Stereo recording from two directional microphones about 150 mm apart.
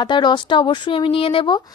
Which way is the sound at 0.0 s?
30° left (ahead or behind).